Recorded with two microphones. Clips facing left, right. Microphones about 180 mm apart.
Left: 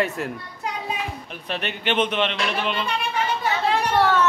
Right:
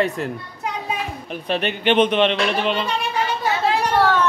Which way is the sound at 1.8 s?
30° right (ahead or behind).